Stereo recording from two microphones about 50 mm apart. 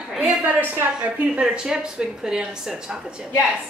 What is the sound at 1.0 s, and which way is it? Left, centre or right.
A woman's voice, centre.